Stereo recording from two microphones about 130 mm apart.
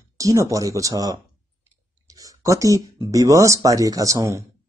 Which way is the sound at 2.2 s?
25° right (ahead or behind).